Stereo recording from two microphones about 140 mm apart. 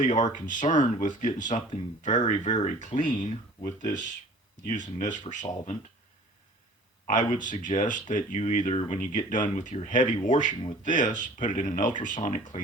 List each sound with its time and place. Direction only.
0.0 s speech: 65° left (ahead or behind)
7.1 s speech: 65° left (ahead or behind)